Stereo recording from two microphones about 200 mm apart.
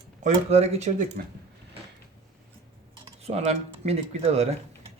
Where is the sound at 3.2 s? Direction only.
30° right (ahead or behind).